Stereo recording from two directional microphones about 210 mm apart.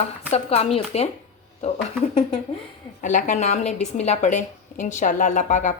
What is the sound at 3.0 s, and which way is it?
A woman's voice, 35° left (ahead or behind).